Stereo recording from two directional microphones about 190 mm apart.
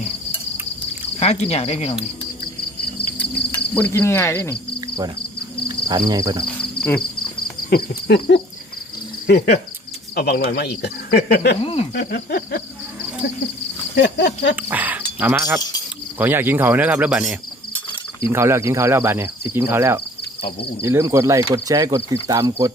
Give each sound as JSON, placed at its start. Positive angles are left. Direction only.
{"t": 1.2, "sound": "speech", "side_deg": 35}
{"t": 3.8, "sound": "speech", "side_deg": 10}
{"t": 5.6, "sound": "speech", "side_deg": -20}
{"t": 7.7, "sound": "speech", "side_deg": 60}
{"t": 11.6, "sound": "speech", "side_deg": 30}
{"t": 11.9, "sound": "speech", "side_deg": 55}
{"t": 13.9, "sound": "speech", "side_deg": 65}
{"t": 14.5, "sound": "a sound", "side_deg": -10}
{"t": 15.2, "sound": "cricket", "side_deg": -10}